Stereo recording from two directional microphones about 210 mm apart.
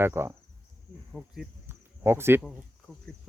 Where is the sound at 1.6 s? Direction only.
10° right (ahead or behind).